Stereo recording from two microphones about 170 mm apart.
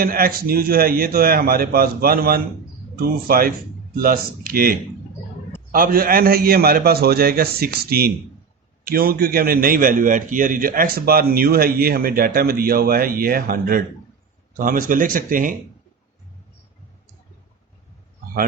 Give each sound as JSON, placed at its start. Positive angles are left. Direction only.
{"t": 0.0, "sound": "a man's voice", "side_deg": -60}